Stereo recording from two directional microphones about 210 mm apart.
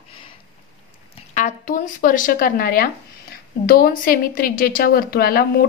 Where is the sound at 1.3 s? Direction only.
40° left (ahead or behind).